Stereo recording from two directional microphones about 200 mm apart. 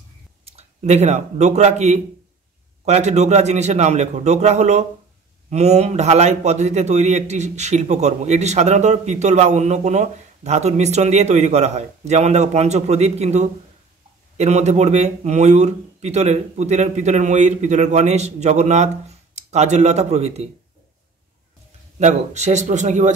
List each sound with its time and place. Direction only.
0.5 s a man's voice: 35° right (ahead or behind)
22.0 s a man's voice: 35° right (ahead or behind)